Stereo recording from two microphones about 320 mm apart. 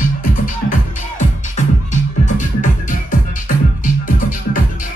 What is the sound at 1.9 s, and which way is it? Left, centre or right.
Music, left.